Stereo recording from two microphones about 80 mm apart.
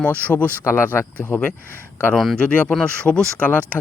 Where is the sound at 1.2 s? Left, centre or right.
Left.